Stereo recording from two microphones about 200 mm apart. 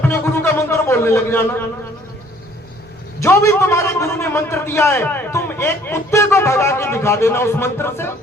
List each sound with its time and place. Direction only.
0.0 s music: 10° left (ahead or behind)
3.2 s a man's voice: 15° left (ahead or behind)